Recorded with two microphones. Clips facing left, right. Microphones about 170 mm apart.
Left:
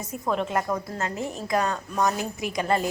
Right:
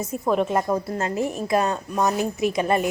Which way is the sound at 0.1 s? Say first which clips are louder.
Right 4 dB; 25° right (ahead or behind).